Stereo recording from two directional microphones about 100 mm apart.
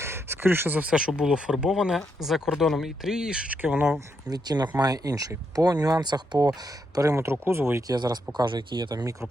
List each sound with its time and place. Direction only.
0.0 s speech: 25° right (ahead or behind)
4.3 s speech: 45° right (ahead or behind)
6.9 s speech: 35° right (ahead or behind)
7.9 s speech: 45° right (ahead or behind)